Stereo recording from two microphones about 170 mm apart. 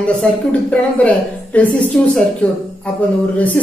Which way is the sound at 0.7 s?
10° left (ahead or behind).